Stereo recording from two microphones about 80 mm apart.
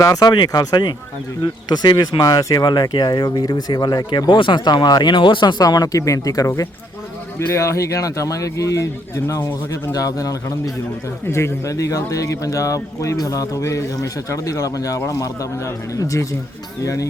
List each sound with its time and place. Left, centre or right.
0.0 s speech: left
2.2 s speech: left
5.6 s speech: left
9.9 s speech: left
11.3 s speech: left